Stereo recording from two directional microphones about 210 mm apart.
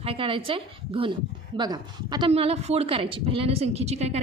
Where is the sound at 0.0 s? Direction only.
25° right (ahead or behind).